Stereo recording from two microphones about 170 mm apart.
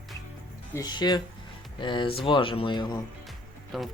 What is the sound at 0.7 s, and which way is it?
Speech, 25° left (ahead or behind).